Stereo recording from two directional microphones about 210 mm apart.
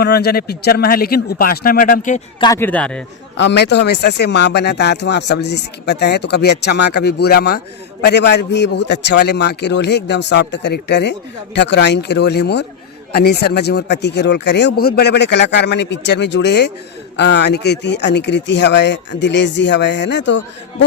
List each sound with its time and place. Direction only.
0.0 s speech: 50° left (ahead or behind)
2.4 s speech: 15° left (ahead or behind)
3.3 s speech: 55° left (ahead or behind)